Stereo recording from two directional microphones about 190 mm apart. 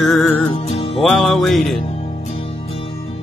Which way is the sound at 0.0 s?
Centre (ahead or behind).